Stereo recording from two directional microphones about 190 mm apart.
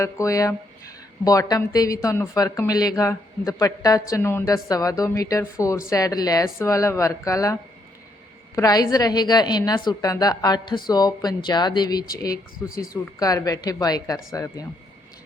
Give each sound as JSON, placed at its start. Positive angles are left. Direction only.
{"t": 0.0, "sound": "a woman's voice", "side_deg": 15}
{"t": 8.5, "sound": "a woman's voice", "side_deg": 20}
{"t": 12.6, "sound": "speech", "side_deg": 50}
{"t": 12.9, "sound": "a woman's voice", "side_deg": 20}